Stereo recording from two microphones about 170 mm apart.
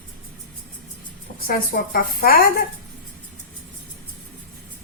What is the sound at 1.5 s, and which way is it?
Speech, 60° left (ahead or behind).